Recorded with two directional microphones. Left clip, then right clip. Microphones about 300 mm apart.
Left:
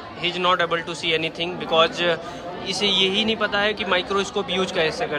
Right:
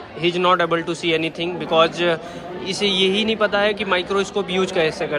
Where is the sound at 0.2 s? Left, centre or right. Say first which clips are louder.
Right 3 dB; centre.